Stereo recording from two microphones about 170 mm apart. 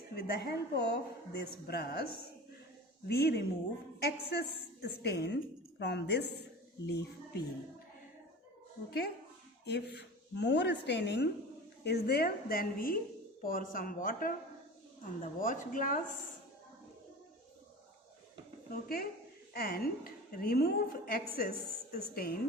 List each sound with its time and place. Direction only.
0.2 s a woman's voice: 65° left (ahead or behind)
3.1 s a woman's voice: 70° left (ahead or behind)
4.8 s speech: 80° left
8.9 s a woman's voice: 70° left (ahead or behind); by 11.3 s 90° left
11.8 s a woman's voice: 75° left (ahead or behind); by 16.1 s 50° left (ahead or behind)
18.7 s a woman's voice: 60° left (ahead or behind)